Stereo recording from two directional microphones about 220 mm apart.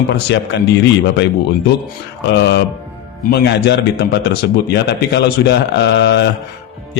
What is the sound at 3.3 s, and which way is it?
A man's voice, 50° left (ahead or behind).